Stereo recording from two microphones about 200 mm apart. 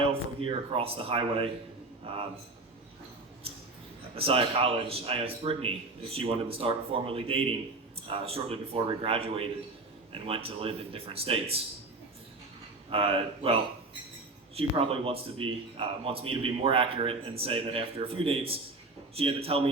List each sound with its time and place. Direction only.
0.0 s a man's voice: 25° right (ahead or behind)
4.1 s a man's voice: 30° right (ahead or behind)
12.9 s a man's voice: 25° right (ahead or behind)